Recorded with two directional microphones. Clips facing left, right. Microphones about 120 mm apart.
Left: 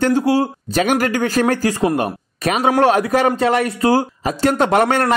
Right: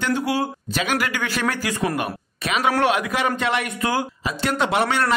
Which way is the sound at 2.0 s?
40° left (ahead or behind).